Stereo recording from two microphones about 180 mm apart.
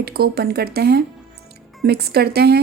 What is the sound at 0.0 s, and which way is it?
Speech, 60° right (ahead or behind).